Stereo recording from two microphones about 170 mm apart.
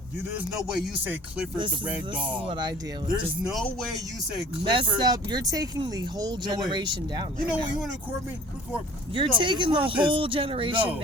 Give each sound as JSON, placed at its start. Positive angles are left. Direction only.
{"t": 0.3, "sound": "speech", "side_deg": -5}
{"t": 2.4, "sound": "speech", "side_deg": -30}
{"t": 3.4, "sound": "speech", "side_deg": 0}
{"t": 4.6, "sound": "speech", "side_deg": -30}
{"t": 7.4, "sound": "speech", "side_deg": -5}
{"t": 9.1, "sound": "speech", "side_deg": -30}